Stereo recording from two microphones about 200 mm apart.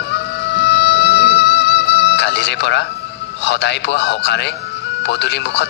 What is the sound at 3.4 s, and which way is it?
Speech, 60° left (ahead or behind).